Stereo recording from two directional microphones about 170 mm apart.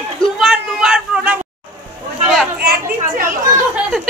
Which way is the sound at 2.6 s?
65° right (ahead or behind).